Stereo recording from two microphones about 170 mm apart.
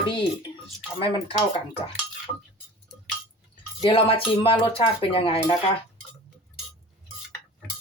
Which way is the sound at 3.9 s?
30° left (ahead or behind).